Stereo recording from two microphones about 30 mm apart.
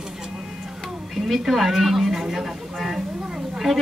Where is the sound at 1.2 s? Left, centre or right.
Centre.